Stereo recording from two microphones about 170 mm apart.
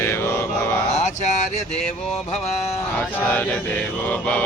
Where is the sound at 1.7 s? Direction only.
5° left (ahead or behind).